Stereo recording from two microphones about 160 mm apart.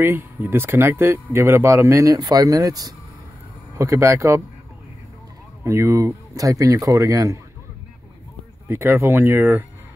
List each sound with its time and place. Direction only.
0.0 s speech: 15° right (ahead or behind)
5.6 s speech: 15° right (ahead or behind)
8.6 s speech: 15° right (ahead or behind)